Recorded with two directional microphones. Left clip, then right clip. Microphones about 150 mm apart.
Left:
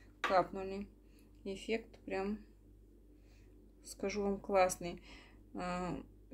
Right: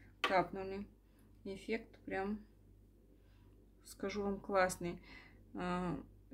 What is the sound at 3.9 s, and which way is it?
Speech, 10° left (ahead or behind).